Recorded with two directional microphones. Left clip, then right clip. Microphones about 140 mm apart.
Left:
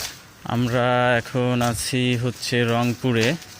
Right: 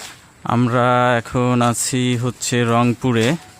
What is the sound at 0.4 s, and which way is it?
Speech, 50° right (ahead or behind).